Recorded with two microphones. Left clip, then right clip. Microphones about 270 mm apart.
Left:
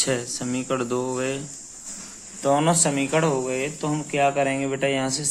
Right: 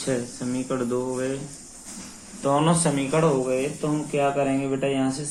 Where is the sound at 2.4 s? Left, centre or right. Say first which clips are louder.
Left 1 dB; left.